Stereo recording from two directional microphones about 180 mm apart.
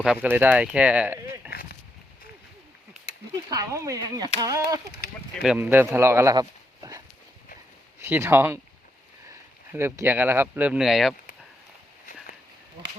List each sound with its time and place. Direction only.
0.0 s speech: 5° right (ahead or behind)
3.5 s speech: 20° right (ahead or behind)
5.4 s speech: 5° right (ahead or behind)
8.0 s speech: 15° right (ahead or behind)